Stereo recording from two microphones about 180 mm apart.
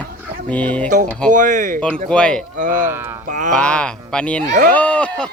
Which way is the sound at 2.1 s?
5° left (ahead or behind).